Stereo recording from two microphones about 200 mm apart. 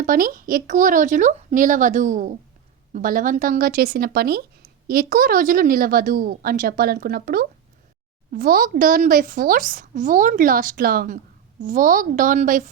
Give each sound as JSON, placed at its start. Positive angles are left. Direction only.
{"t": 0.0, "sound": "speech", "side_deg": -45}